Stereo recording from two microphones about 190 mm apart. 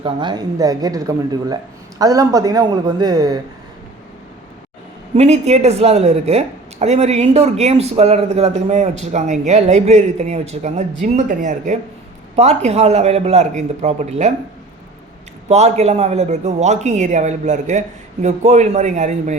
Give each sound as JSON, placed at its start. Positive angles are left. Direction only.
{"t": 0.0, "sound": "speech", "side_deg": -25}
{"t": 5.1, "sound": "a woman's voice", "side_deg": -35}
{"t": 15.4, "sound": "a woman's voice", "side_deg": -35}